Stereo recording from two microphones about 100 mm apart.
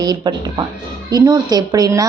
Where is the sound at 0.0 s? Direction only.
45° right (ahead or behind).